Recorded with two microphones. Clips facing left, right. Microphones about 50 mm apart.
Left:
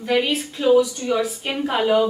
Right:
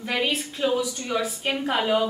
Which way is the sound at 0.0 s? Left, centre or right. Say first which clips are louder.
Left 5 dB; centre.